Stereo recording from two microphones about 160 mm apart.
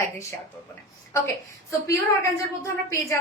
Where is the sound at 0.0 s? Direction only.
15° left (ahead or behind).